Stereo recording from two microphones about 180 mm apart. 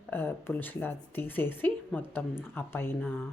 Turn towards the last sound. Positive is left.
turn(degrees=10)  # may be behind; listen again after turning